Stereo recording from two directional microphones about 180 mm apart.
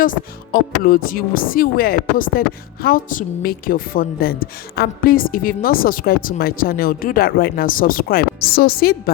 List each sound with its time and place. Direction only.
0.0 s a woman's voice: 50° left (ahead or behind)